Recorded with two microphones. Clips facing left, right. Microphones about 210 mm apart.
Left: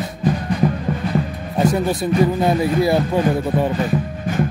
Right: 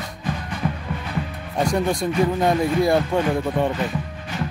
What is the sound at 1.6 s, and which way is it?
Speech, 5° left (ahead or behind).